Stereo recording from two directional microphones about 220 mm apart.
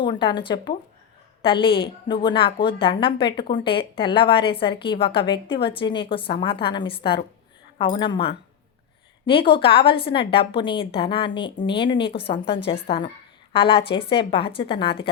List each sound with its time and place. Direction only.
0.0 s a woman's voice: 20° left (ahead or behind)